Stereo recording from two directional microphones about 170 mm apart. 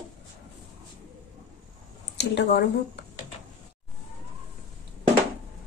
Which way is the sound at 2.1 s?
90° left.